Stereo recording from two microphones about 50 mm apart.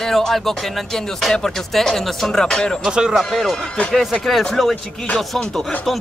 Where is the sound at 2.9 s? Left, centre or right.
Centre.